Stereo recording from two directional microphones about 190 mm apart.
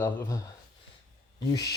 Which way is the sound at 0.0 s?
15° left (ahead or behind).